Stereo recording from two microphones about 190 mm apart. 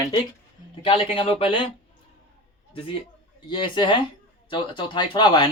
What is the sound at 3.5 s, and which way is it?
Speech, 25° left (ahead or behind).